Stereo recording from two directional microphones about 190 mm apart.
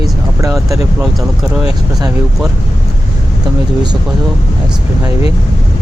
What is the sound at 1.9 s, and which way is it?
Speech, 20° right (ahead or behind).